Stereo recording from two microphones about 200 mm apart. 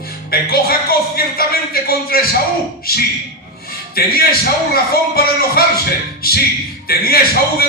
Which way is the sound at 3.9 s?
50° left (ahead or behind).